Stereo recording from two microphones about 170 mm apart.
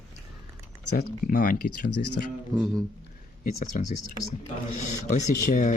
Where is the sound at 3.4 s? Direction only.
55° left (ahead or behind).